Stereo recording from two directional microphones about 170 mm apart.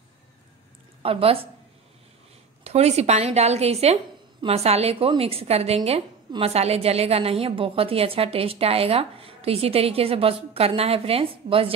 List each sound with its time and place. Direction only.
1.0 s a woman's voice: 35° right (ahead or behind)
2.6 s a woman's voice: 40° right (ahead or behind)